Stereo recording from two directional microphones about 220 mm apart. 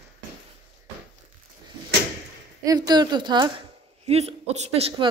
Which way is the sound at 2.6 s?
15° right (ahead or behind).